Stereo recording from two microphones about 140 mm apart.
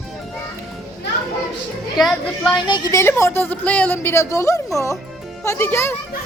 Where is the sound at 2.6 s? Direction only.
35° left (ahead or behind).